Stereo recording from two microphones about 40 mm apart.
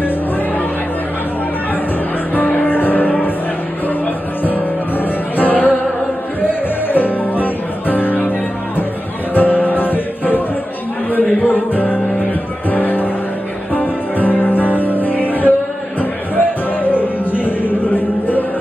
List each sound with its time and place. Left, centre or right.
2.3 s music: left
6.9 s music: left